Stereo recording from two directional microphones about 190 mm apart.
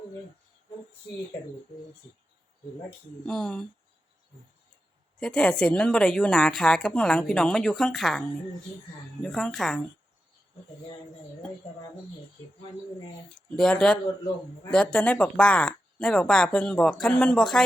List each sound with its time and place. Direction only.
3.2 s a woman's voice: 5° left (ahead or behind)
5.2 s a woman's voice: 5° left (ahead or behind)
9.2 s a woman's voice: centre (ahead or behind)
13.6 s a woman's voice: 5° left (ahead or behind)